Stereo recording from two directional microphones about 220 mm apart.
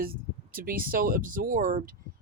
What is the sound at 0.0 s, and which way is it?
Speech, 40° right (ahead or behind).